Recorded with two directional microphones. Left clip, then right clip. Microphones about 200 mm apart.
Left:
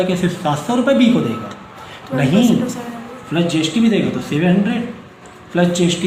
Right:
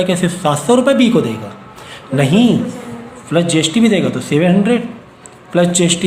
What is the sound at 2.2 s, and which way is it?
A man's voice, 50° right (ahead or behind).